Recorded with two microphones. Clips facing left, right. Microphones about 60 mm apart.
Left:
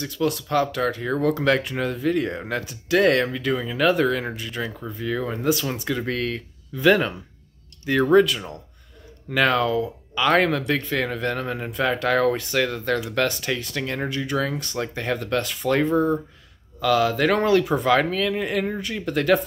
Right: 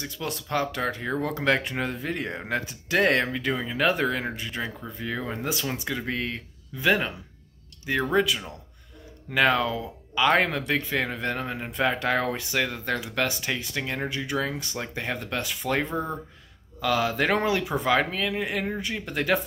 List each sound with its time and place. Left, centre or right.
0.0 s speech: right
5.7 s speech: centre
16.8 s speech: right